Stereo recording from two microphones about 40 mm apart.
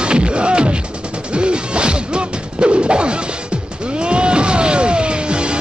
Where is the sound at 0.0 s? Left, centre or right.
Right.